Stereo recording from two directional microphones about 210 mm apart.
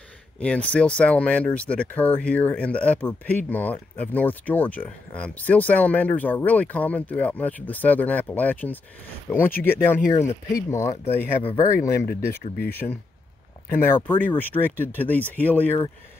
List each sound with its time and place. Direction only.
0.4 s speech: 5° left (ahead or behind)
12.1 s speech: 45° left (ahead or behind)
13.7 s speech: 10° left (ahead or behind)